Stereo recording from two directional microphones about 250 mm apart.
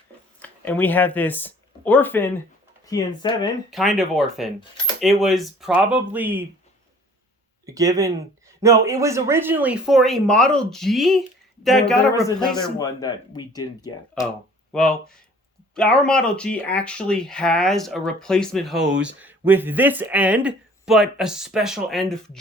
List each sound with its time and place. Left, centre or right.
0.4 s speech: centre
3.7 s speech: centre
7.6 s speech: centre
12.8 s speech: centre
14.7 s speech: centre